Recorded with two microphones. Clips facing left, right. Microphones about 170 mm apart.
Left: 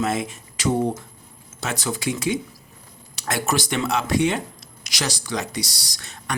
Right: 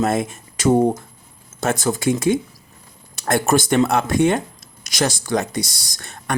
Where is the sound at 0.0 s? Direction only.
50° right (ahead or behind).